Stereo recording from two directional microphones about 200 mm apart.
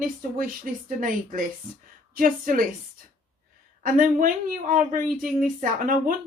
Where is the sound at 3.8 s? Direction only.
45° right (ahead or behind).